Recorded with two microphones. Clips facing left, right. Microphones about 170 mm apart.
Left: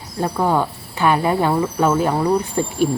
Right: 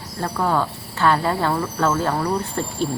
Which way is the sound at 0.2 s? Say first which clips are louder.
Left 3 dB; 15° left (ahead or behind).